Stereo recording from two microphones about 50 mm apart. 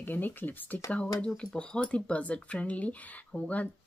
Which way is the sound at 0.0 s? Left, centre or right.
Left.